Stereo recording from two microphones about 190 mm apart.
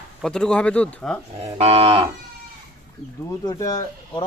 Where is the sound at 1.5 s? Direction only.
30° right (ahead or behind).